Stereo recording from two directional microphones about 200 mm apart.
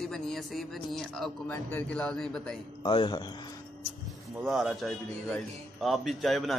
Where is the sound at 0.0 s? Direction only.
Centre (ahead or behind).